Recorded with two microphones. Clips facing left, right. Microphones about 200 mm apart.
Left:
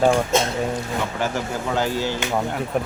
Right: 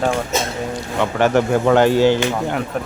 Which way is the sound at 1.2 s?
70° right (ahead or behind).